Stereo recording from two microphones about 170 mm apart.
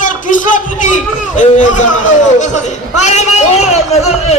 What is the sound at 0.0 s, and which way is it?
A man's voice, 50° left (ahead or behind).